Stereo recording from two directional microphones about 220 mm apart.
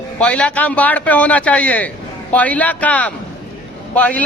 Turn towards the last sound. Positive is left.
turn(degrees=5)  # may be behind; listen again after turning